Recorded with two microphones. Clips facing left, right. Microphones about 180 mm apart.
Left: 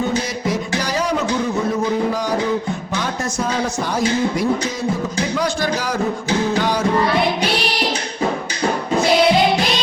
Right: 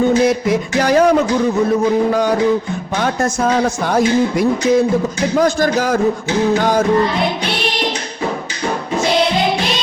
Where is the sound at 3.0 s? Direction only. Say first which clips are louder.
Right 9 dB; 55° right (ahead or behind).